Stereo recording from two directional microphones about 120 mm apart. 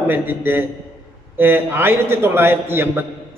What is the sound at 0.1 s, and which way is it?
A man's voice, 15° right (ahead or behind).